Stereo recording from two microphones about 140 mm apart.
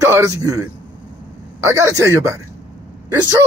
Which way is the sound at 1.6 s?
20° right (ahead or behind).